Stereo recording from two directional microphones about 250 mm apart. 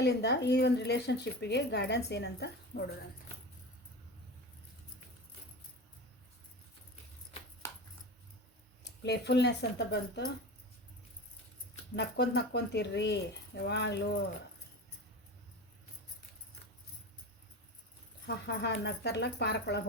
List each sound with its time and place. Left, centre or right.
0.0 s speech: left
7.6 s a sound: centre
8.8 s speech: left
11.9 s speech: left
18.4 s speech: left